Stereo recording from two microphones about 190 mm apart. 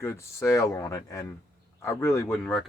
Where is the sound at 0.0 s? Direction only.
15° left (ahead or behind).